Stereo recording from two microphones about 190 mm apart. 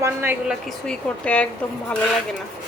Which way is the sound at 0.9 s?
5° left (ahead or behind).